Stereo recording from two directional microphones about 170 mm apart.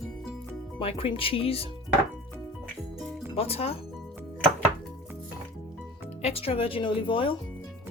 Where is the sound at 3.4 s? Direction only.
35° left (ahead or behind).